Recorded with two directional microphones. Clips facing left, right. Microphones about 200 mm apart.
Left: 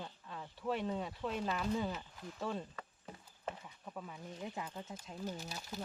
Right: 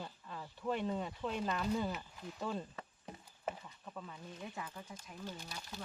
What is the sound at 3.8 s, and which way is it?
Speech, 10° left (ahead or behind).